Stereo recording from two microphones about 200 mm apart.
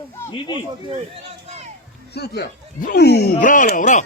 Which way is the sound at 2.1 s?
55° left (ahead or behind).